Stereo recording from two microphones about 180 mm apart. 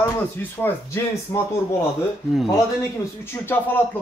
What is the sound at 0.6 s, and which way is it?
Speech, 15° left (ahead or behind).